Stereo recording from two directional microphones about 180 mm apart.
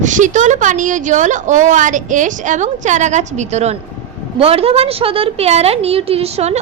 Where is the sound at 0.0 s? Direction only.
45° right (ahead or behind).